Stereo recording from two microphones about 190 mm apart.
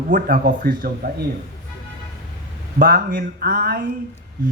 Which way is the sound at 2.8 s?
45° right (ahead or behind).